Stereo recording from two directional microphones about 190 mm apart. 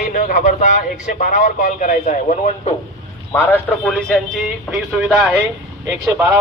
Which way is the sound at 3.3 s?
10° left (ahead or behind).